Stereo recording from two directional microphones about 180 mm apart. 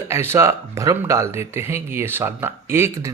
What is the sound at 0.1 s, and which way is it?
Speech, 15° right (ahead or behind).